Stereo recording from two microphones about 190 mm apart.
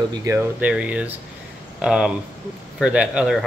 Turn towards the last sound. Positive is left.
turn(degrees=-5)  # may be behind; listen again after turning